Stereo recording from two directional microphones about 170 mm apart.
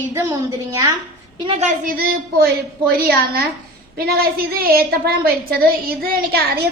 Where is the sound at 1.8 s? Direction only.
60° right (ahead or behind).